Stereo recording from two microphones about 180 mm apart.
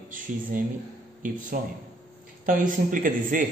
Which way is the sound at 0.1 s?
50° right (ahead or behind).